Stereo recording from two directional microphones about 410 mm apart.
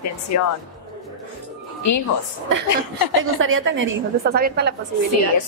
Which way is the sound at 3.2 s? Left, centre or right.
Right.